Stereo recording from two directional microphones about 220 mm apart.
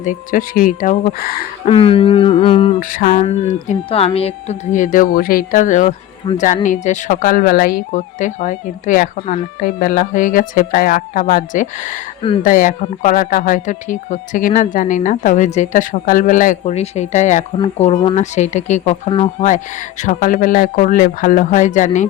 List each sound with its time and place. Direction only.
0.0 s a woman's voice: 35° left (ahead or behind)
1.6 s a sound: 25° left (ahead or behind)
2.8 s a woman's voice: 35° left (ahead or behind)